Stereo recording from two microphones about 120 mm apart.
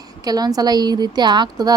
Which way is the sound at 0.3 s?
35° right (ahead or behind).